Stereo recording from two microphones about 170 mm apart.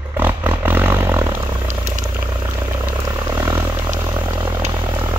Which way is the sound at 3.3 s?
20° right (ahead or behind).